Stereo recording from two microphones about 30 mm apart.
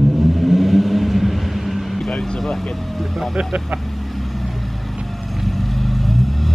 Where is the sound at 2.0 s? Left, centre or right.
Centre.